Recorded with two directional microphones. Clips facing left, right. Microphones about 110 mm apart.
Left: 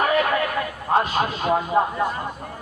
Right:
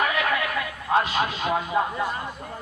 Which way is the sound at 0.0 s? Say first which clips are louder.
Left 4 dB; 40° left (ahead or behind).